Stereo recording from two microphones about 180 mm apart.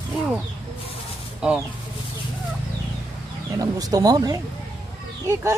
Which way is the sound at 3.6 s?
20° right (ahead or behind).